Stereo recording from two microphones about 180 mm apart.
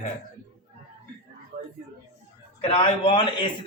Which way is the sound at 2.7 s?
30° left (ahead or behind).